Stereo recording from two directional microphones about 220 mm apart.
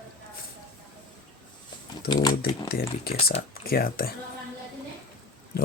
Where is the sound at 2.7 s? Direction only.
45° left (ahead or behind).